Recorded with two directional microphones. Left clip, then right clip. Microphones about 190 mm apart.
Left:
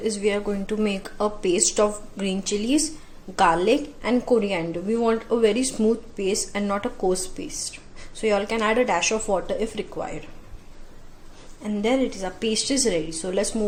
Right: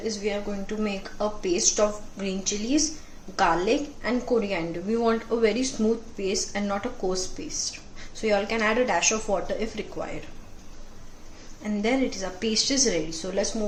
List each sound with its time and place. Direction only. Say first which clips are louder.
0.0 s a woman's voice: left 5 dB; 40° left (ahead or behind)
11.6 s a woman's voice: left 3 dB; 30° left (ahead or behind)